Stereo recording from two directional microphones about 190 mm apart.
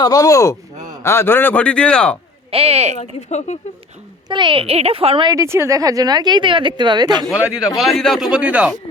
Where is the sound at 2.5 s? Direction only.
30° right (ahead or behind).